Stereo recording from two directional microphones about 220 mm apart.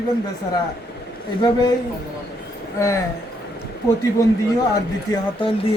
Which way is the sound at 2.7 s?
15° left (ahead or behind).